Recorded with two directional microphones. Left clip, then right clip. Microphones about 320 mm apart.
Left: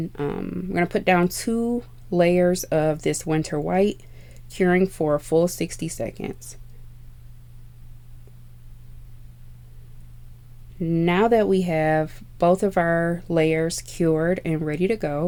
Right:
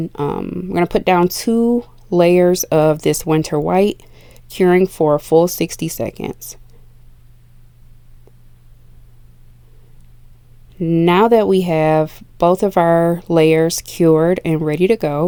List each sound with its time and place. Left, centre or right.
0.0 s speech: right
10.8 s speech: right